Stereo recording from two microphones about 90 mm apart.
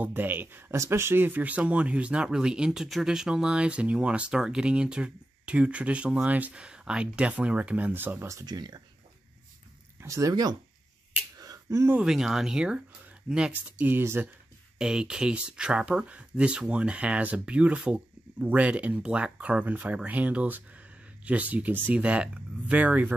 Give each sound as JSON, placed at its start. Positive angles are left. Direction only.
{"t": 0.0, "sound": "speech", "side_deg": -20}
{"t": 8.5, "sound": "speech", "side_deg": -50}
{"t": 10.0, "sound": "speech", "side_deg": -40}
{"t": 11.3, "sound": "a sound", "side_deg": -40}
{"t": 12.0, "sound": "speech", "side_deg": -5}
{"t": 14.8, "sound": "speech", "side_deg": -10}